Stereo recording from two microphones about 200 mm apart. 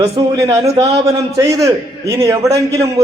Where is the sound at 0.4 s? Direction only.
30° right (ahead or behind).